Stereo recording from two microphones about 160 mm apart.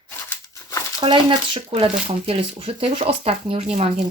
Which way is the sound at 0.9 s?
30° right (ahead or behind).